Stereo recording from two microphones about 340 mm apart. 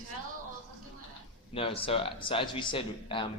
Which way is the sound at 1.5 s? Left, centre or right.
Centre.